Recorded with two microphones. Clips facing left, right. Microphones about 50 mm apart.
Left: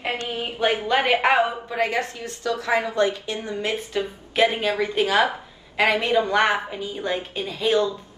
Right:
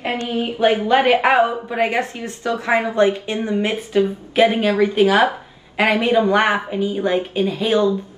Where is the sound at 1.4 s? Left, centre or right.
Right.